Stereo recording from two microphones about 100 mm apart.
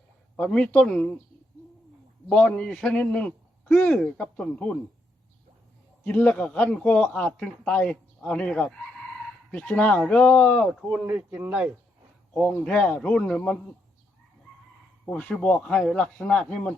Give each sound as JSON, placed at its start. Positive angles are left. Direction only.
{"t": 0.3, "sound": "a man's voice", "side_deg": 10}
{"t": 2.3, "sound": "a man's voice", "side_deg": 10}
{"t": 6.1, "sound": "a man's voice", "side_deg": 15}
{"t": 11.0, "sound": "speech", "side_deg": -15}
{"t": 12.3, "sound": "a man's voice", "side_deg": 5}
{"t": 15.0, "sound": "a man's voice", "side_deg": 10}